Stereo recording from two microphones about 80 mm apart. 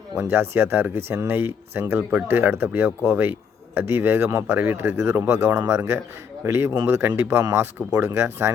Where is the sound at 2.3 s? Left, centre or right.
Right.